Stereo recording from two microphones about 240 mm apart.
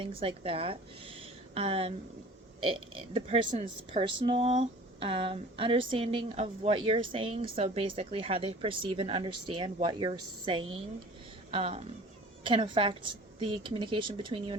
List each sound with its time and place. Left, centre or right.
0.0 s a woman's voice: right
3.1 s a woman's voice: right